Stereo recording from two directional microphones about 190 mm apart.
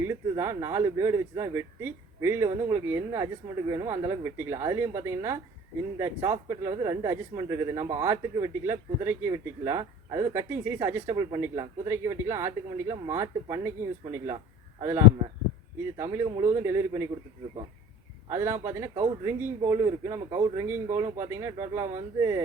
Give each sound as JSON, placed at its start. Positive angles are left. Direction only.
{"t": 0.0, "sound": "speech", "side_deg": -15}
{"t": 14.8, "sound": "speech", "side_deg": -15}
{"t": 18.3, "sound": "speech", "side_deg": -15}